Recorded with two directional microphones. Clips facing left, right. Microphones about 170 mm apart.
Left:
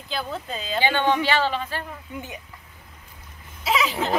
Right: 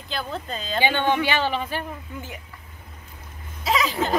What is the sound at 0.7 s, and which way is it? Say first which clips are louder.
Speech: even; 15° right (ahead or behind).